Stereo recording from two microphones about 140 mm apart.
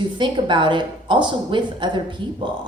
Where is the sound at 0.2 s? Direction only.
35° right (ahead or behind).